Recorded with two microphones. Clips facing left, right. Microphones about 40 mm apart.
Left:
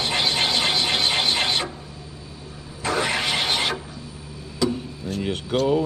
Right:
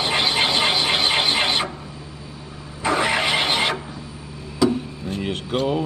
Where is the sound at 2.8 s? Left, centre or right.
Centre.